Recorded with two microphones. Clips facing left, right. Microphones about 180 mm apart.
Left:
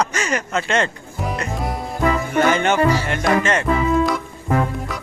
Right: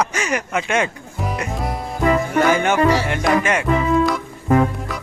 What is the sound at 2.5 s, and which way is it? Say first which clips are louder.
Music: right 1 dB; 10° right (ahead or behind).